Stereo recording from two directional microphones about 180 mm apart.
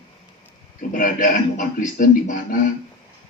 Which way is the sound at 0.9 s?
50° left (ahead or behind).